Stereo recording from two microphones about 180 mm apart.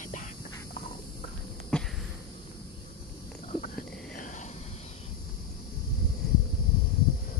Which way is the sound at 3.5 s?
45° left (ahead or behind).